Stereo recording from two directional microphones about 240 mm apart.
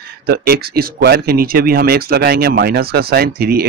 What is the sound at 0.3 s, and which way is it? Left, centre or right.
Speech, right.